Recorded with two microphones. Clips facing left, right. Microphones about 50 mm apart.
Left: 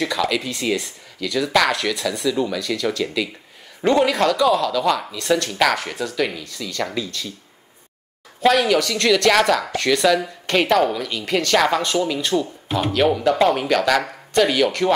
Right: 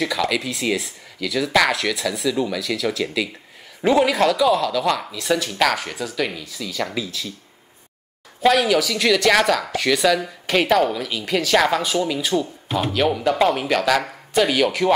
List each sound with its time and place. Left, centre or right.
0.0 s speech: centre
8.4 s speech: centre